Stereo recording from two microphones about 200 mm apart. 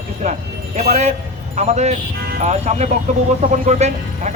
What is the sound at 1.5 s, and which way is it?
A man's voice, 35° right (ahead or behind).